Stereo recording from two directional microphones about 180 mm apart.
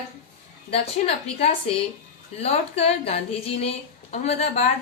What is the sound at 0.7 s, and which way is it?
A woman's voice, 35° left (ahead or behind).